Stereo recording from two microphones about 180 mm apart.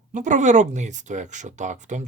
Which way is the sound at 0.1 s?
45° right (ahead or behind).